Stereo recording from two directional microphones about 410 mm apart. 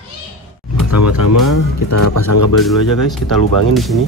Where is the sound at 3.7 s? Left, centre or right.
Centre.